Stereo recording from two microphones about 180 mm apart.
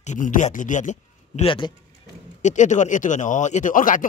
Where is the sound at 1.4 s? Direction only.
30° left (ahead or behind).